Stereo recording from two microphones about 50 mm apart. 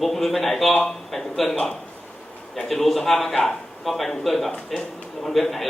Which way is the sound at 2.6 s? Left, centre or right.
Centre.